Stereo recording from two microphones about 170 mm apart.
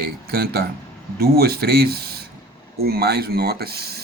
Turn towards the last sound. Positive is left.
turn(degrees=-70)  # may be behind; listen again after turning